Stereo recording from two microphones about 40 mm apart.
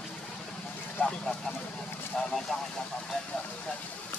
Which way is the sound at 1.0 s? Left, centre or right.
Left.